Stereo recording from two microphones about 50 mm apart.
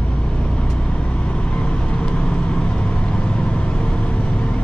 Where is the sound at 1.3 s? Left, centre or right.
Left.